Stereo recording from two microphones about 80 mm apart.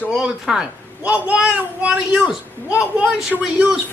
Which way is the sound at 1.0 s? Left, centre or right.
Centre.